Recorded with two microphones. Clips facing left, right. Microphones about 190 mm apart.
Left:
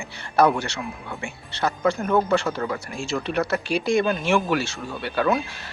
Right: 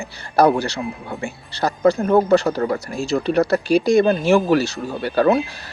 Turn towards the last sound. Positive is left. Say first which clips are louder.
# right 6 dB
turn(degrees=-35)  # may be behind; listen again after turning